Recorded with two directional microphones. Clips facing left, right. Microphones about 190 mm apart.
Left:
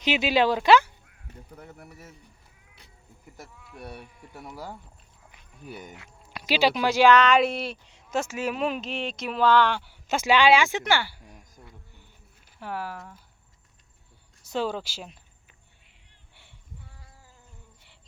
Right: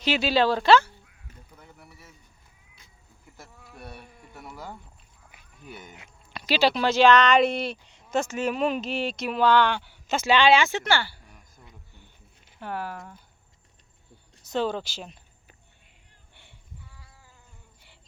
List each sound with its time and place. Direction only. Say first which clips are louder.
0.0 s speech: even; 15° left (ahead or behind)
1.5 s speech: left 6 dB; 45° left (ahead or behind)
3.8 s speech: left 3 dB; 35° left (ahead or behind)
4.4 s speech: left 1 dB; 10° left (ahead or behind)
5.6 s speech: left 3 dB; 45° left (ahead or behind)
6.3 s speech: even; 10° left (ahead or behind)
12.5 s speech: right 1 dB; centre (ahead or behind)
14.5 s speech: right 2 dB; 10° left (ahead or behind)
16.3 s a sound: right 1 dB; 5° left (ahead or behind)